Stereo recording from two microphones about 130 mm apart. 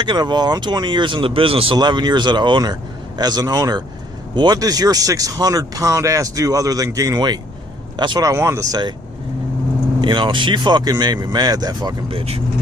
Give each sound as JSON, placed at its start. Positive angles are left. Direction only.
{"t": 0.0, "sound": "speech", "side_deg": -35}
{"t": 8.3, "sound": "speech", "side_deg": -25}
{"t": 10.0, "sound": "speech", "side_deg": -35}
{"t": 12.0, "sound": "speech", "side_deg": -45}